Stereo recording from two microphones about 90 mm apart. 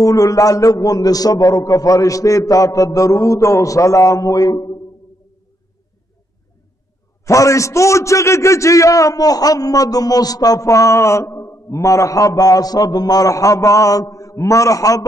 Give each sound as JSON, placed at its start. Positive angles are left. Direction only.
{"t": 0.0, "sound": "a man's voice", "side_deg": 40}
{"t": 7.2, "sound": "a man's voice", "side_deg": 35}